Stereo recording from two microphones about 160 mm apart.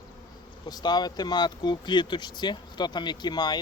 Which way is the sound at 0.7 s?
25° left (ahead or behind).